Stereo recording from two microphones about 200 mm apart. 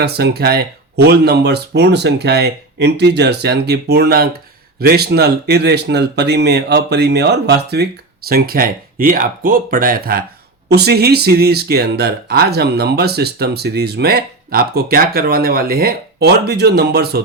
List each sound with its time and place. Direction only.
0.0 s speech: 55° right (ahead or behind)